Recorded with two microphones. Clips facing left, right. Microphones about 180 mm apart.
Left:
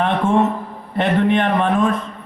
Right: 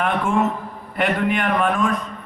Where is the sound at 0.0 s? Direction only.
25° left (ahead or behind).